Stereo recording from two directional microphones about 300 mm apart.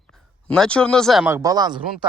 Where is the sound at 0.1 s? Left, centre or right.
Centre.